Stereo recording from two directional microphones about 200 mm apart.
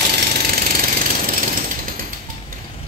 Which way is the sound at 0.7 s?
45° right (ahead or behind).